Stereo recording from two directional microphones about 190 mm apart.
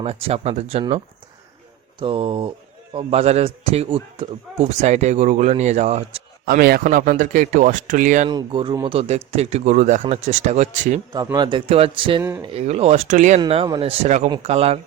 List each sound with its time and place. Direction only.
0.0 s a man's voice: 30° right (ahead or behind)
6.4 s speech: 55° right (ahead or behind)
8.3 s a man's voice: 25° right (ahead or behind)
11.1 s a man's voice: 20° right (ahead or behind)
12.2 s speech: 15° right (ahead or behind)
12.5 s a man's voice: 35° right (ahead or behind)
13.4 s a man's voice: 25° right (ahead or behind)